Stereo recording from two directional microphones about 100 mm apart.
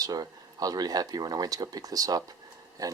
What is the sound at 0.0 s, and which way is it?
Speech, 40° right (ahead or behind).